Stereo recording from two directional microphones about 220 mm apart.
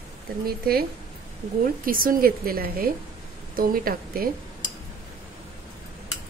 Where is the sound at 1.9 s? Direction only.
40° right (ahead or behind).